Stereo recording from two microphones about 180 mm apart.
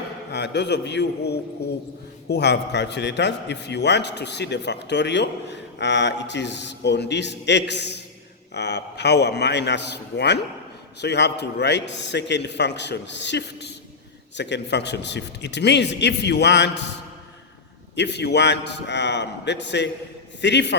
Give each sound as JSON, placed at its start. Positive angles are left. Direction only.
{"t": 0.3, "sound": "a man's voice", "side_deg": 70}
{"t": 17.9, "sound": "a man's voice", "side_deg": 70}